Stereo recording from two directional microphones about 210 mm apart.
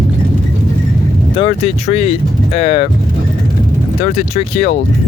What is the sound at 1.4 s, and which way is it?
Speech, 25° left (ahead or behind).